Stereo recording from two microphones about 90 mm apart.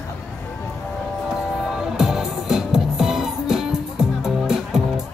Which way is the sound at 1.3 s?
5° right (ahead or behind).